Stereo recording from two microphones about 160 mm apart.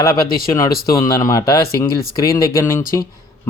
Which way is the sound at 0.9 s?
20° left (ahead or behind).